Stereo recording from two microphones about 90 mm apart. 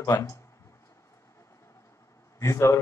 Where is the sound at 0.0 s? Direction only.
40° left (ahead or behind).